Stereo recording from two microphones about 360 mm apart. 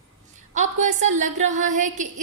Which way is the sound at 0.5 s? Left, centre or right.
Centre.